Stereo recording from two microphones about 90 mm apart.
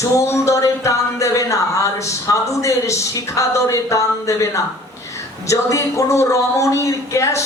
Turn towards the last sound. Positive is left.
turn(degrees=35)  # may be behind; listen again after turning